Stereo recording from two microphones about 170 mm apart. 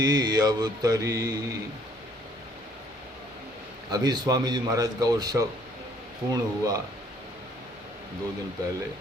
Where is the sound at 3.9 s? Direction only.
25° right (ahead or behind).